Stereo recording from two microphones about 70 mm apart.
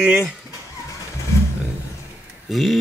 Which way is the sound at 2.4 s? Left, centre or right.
Centre.